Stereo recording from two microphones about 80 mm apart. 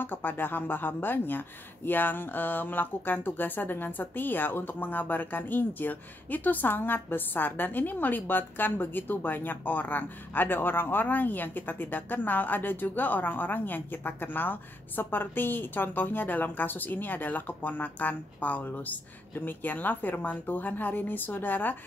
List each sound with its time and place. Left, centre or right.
0.0 s speech: left